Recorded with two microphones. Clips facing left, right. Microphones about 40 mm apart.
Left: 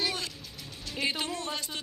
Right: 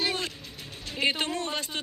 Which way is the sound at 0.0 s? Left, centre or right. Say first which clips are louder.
Right 3 dB; right.